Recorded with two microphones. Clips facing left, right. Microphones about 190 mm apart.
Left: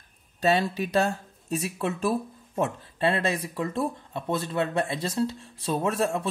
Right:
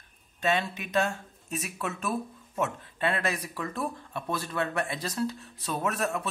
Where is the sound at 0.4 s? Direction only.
35° left (ahead or behind).